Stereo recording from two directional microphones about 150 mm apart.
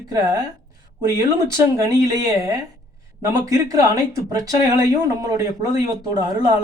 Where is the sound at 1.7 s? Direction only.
25° right (ahead or behind).